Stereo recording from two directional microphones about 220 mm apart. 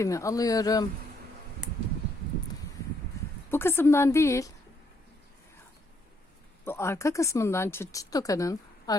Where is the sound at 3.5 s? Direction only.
10° left (ahead or behind).